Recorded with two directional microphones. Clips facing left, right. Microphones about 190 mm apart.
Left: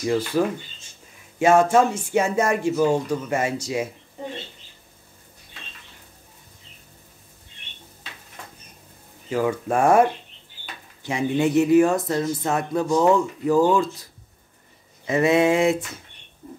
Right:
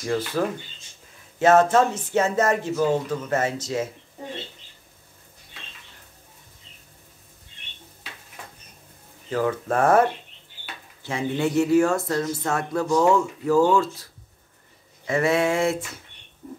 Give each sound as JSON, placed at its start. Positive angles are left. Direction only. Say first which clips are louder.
{"t": 0.1, "sound": "speech", "louder": "left 2 dB", "side_deg": 10}
{"t": 1.4, "sound": "speech", "louder": "even", "side_deg": 10}
{"t": 9.3, "sound": "speech", "louder": "left 1 dB", "side_deg": 10}
{"t": 15.0, "sound": "a sound", "louder": "left 3 dB", "side_deg": 20}